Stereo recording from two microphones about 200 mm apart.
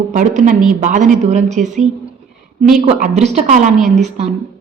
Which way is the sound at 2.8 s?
35° right (ahead or behind).